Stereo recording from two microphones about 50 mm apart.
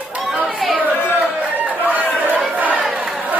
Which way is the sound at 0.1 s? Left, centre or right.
Right.